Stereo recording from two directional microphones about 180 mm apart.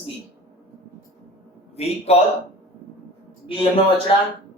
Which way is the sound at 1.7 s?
35° left (ahead or behind).